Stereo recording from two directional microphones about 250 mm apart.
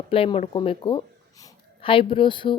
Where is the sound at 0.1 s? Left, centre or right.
Left.